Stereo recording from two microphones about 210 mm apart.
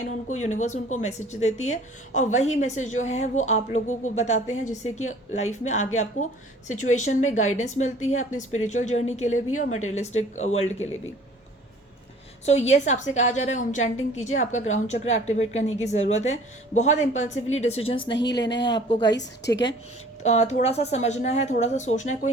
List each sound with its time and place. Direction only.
0.4 s a woman's voice: 35° left (ahead or behind)
12.5 s a woman's voice: 30° left (ahead or behind)
18.1 s a woman's voice: 55° left (ahead or behind)
18.6 s a woman's voice: 25° left (ahead or behind)
19.1 s a woman's voice: 55° left (ahead or behind)
20.2 s a woman's voice: 30° left (ahead or behind)